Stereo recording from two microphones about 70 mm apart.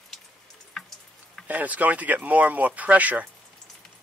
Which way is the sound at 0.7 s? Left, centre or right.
Centre.